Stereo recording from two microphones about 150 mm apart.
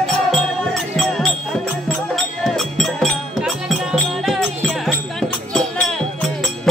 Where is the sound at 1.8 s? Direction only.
Centre (ahead or behind).